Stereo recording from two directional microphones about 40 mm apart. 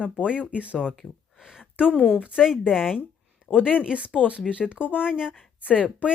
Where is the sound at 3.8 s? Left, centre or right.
Right.